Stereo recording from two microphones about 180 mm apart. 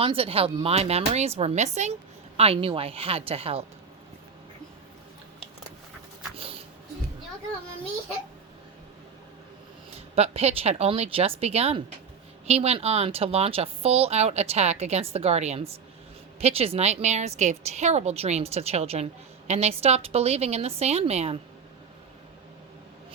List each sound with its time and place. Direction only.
0.0 s a woman's voice: 30° right (ahead or behind)
6.3 s music: 30° right (ahead or behind)
9.9 s a woman's voice: 35° right (ahead or behind)